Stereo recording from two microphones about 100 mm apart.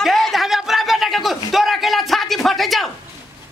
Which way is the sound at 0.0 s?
Centre (ahead or behind).